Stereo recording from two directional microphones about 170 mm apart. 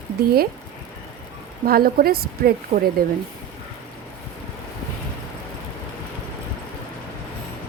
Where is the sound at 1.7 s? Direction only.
60° right (ahead or behind).